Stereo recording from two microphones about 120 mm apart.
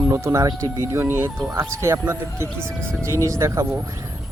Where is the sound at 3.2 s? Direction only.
25° right (ahead or behind).